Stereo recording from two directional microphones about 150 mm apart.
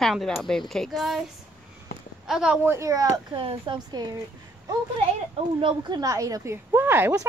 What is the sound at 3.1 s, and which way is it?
Speech, 35° right (ahead or behind).